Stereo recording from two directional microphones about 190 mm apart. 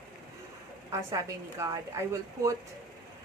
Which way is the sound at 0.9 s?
15° right (ahead or behind).